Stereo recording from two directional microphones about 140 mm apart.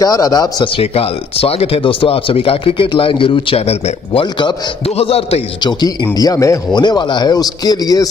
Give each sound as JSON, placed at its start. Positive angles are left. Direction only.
{"t": 0.0, "sound": "a man's voice", "side_deg": 25}
{"t": 0.7, "sound": "speech", "side_deg": 45}
{"t": 5.6, "sound": "a man's voice", "side_deg": 30}